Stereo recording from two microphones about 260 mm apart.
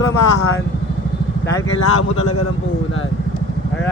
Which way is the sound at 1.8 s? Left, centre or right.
Left.